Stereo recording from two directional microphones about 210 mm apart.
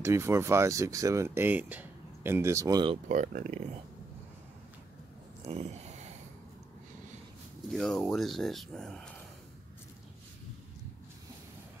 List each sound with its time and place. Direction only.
0.0 s speech: 15° right (ahead or behind)
3.1 s speech: 35° right (ahead or behind)
5.5 s a sound: 30° right (ahead or behind)
7.7 s speech: centre (ahead or behind)